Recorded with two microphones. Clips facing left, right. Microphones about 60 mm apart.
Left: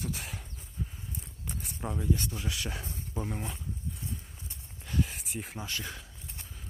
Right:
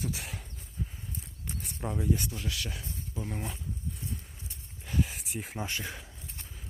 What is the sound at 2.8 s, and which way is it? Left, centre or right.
Speech, left.